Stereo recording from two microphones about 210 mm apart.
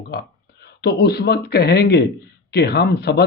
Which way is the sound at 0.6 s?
50° left (ahead or behind).